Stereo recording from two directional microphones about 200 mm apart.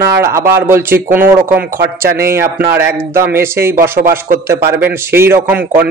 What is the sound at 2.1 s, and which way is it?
Speech, 50° right (ahead or behind).